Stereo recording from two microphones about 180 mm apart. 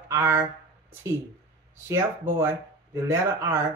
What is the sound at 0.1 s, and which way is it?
Speech, 15° right (ahead or behind).